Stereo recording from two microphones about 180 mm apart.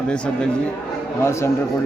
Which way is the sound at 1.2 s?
15° left (ahead or behind).